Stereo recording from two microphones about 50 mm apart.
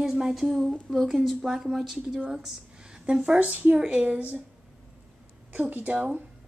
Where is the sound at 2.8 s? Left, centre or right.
Centre.